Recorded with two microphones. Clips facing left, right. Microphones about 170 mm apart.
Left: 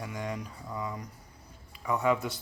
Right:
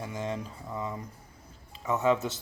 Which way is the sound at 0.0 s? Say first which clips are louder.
Right 2 dB; 25° right (ahead or behind).